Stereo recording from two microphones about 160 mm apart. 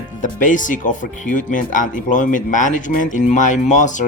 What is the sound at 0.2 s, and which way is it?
Speech, 55° left (ahead or behind).